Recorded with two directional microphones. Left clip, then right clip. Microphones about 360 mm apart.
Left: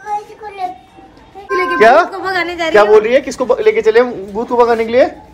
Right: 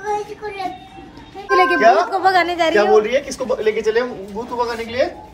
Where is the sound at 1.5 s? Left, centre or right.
Right.